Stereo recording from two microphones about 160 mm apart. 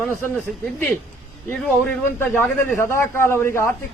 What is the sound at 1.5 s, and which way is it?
A man's voice, 10° left (ahead or behind).